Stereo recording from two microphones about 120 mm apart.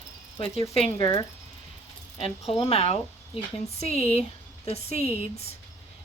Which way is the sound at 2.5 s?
55° left (ahead or behind).